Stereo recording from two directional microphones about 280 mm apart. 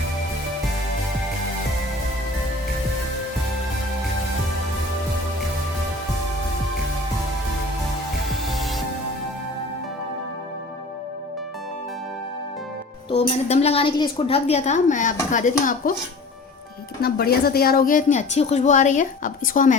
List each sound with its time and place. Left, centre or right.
8.5 s music: centre
13.1 s a woman's voice: left
17.0 s a woman's voice: left